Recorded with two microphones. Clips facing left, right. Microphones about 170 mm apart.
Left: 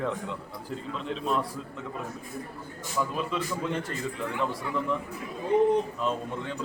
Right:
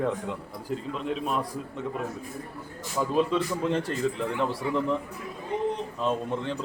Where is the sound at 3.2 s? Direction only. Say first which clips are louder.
Right 6 dB; 35° right (ahead or behind).